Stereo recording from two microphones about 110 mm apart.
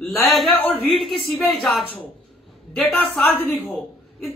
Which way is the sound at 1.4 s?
Centre (ahead or behind).